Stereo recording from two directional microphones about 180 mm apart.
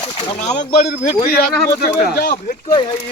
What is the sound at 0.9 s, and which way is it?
Speech, 60° left (ahead or behind).